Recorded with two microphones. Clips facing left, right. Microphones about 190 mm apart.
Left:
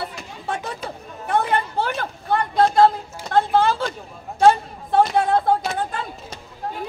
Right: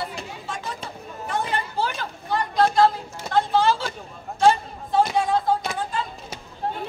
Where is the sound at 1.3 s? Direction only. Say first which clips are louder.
Left 6 dB; 60° left (ahead or behind).